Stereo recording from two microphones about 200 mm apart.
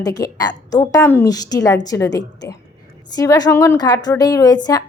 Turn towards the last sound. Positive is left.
turn(degrees=20)  # may be behind; listen again after turning